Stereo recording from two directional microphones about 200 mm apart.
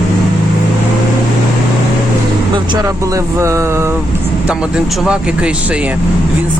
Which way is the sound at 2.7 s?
15° right (ahead or behind).